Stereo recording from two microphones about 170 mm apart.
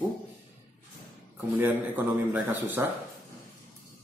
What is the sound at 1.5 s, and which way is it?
Speech, 10° right (ahead or behind).